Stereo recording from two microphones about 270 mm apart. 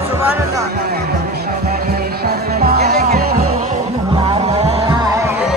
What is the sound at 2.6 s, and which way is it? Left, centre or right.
Music, right.